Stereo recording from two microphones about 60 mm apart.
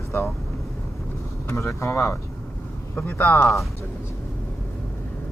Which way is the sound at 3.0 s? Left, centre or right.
Left.